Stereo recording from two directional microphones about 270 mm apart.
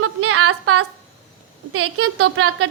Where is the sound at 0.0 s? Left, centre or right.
Right.